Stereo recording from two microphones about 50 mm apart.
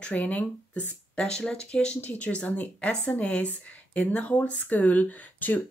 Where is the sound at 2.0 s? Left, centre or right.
Left.